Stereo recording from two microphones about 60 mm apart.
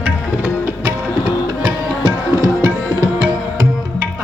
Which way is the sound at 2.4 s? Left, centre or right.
Right.